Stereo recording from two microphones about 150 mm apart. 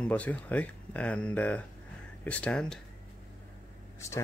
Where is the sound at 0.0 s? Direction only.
10° left (ahead or behind).